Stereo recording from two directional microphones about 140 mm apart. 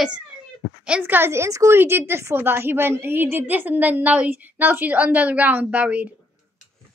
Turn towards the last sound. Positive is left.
turn(degrees=-10)  # may be behind; listen again after turning